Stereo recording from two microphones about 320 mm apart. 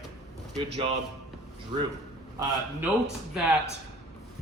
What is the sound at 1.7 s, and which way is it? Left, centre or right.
Speech, centre.